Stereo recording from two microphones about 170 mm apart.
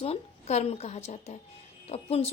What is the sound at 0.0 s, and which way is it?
A woman's voice, 35° left (ahead or behind).